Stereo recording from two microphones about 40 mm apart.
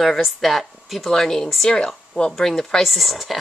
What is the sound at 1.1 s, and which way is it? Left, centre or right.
Speech, centre.